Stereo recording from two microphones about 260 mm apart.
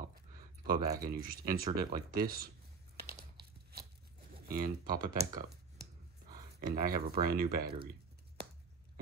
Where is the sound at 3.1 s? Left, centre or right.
Right.